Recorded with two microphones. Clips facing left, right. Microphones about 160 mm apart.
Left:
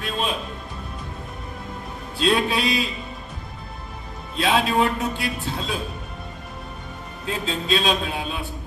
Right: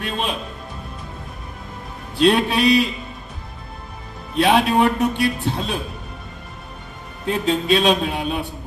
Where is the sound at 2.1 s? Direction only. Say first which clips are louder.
Right 5 dB; 65° right (ahead or behind).